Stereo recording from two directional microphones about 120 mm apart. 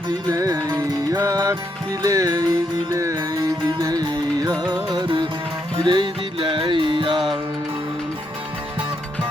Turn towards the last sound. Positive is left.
turn(degrees=-40)  # may be behind; listen again after turning